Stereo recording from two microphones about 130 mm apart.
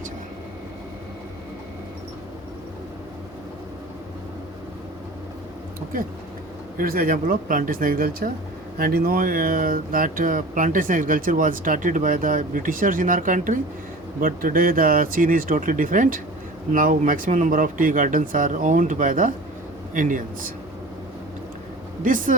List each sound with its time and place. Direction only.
6.7 s speech: 90° right
22.0 s speech: 90° right